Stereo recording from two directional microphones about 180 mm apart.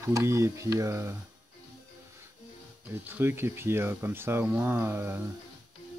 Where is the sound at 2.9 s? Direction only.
15° right (ahead or behind).